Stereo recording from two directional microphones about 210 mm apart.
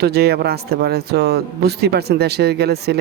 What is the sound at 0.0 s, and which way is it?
A man's voice, 50° right (ahead or behind).